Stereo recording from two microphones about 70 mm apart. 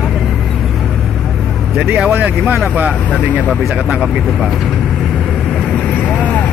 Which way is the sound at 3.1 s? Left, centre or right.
Left.